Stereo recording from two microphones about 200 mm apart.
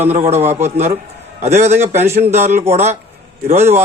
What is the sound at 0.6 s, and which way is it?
Speech, 35° right (ahead or behind).